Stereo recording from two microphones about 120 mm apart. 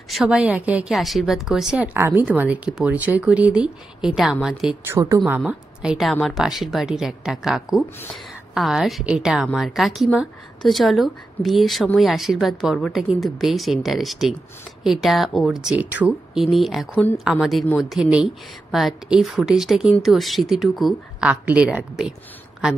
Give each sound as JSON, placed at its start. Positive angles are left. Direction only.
{"t": 0.1, "sound": "speech", "side_deg": -5}
{"t": 0.9, "sound": "speech", "side_deg": 0}
{"t": 2.0, "sound": "a woman's voice", "side_deg": -20}
{"t": 4.9, "sound": "a woman's voice", "side_deg": -20}
{"t": 5.4, "sound": "a woman's voice", "side_deg": -5}
{"t": 21.3, "sound": "speech", "side_deg": -10}